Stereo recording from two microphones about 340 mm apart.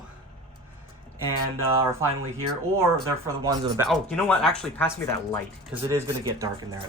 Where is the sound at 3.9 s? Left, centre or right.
Centre.